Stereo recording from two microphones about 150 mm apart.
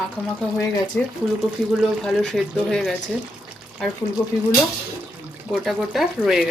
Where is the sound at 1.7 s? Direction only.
Centre (ahead or behind).